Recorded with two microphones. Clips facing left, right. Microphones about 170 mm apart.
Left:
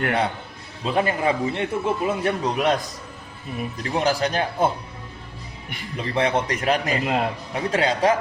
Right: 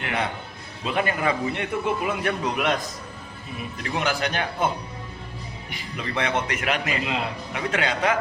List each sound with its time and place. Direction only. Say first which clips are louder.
0.9 s a man's voice: left 3 dB; 30° left (ahead or behind)
3.8 s a man's voice: left 4 dB; 35° left (ahead or behind)
6.0 s a man's voice: left 4 dB; 30° left (ahead or behind); by 7.3 s 45° left (ahead or behind)
7.5 s a man's voice: left 3 dB; 35° left (ahead or behind)